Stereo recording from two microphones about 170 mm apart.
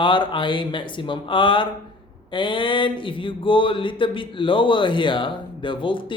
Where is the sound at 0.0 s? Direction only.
30° left (ahead or behind).